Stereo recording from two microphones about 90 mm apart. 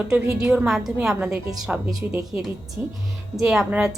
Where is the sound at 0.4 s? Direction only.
10° right (ahead or behind).